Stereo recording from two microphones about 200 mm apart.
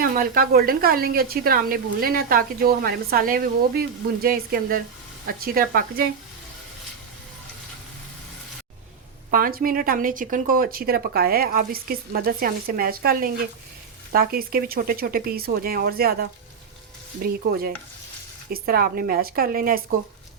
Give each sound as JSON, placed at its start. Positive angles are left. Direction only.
{"t": 0.0, "sound": "speech", "side_deg": -45}
{"t": 9.3, "sound": "speech", "side_deg": -45}
{"t": 17.2, "sound": "speech", "side_deg": -50}